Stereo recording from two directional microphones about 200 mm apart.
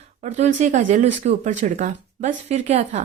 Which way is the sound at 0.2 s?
35° right (ahead or behind).